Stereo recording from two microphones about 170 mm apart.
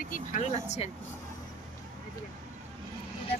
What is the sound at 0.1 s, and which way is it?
Speech, 40° left (ahead or behind).